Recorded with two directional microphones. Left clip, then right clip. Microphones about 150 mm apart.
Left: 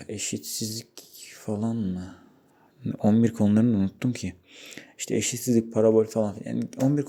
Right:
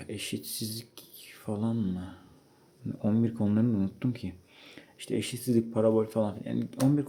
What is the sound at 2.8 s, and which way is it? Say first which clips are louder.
Speech: left 7 dB; 30° left (ahead or behind).